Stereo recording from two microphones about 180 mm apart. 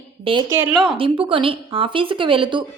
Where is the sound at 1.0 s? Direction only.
30° right (ahead or behind).